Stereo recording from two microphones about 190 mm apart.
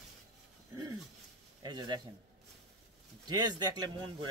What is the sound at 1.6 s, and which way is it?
Speech, 20° right (ahead or behind).